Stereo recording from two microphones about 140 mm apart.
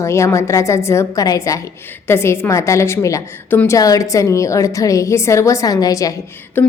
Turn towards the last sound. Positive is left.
turn(degrees=15)  # may be behind; listen again after turning